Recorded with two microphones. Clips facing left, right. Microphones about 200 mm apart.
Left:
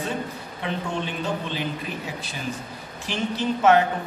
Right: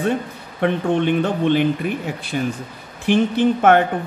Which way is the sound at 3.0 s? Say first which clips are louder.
Right 11 dB; 55° right (ahead or behind).